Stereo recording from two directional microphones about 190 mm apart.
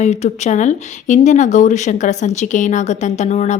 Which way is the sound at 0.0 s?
35° left (ahead or behind).